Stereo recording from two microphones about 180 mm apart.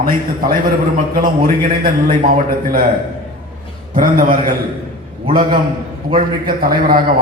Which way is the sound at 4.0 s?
50° right (ahead or behind).